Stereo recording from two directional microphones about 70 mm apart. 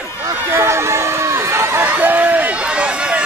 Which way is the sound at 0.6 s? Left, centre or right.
Right.